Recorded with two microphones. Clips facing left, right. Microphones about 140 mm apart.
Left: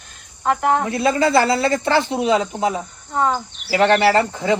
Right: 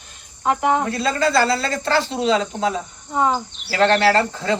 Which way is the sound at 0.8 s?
20° left (ahead or behind).